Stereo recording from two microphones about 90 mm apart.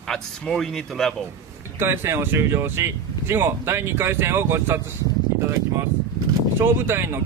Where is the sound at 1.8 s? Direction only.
25° right (ahead or behind).